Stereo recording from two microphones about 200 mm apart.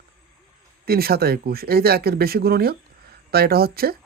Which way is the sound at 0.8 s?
50° right (ahead or behind).